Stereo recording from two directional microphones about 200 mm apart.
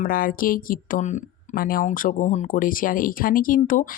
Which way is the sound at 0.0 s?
45° left (ahead or behind).